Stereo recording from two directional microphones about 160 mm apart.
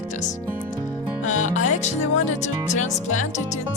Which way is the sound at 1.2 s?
50° left (ahead or behind).